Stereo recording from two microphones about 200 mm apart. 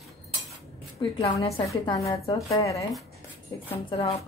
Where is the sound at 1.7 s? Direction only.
15° left (ahead or behind).